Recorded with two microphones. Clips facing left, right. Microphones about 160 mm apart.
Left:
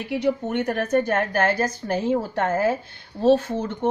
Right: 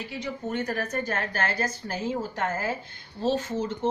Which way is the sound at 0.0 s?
60° left (ahead or behind).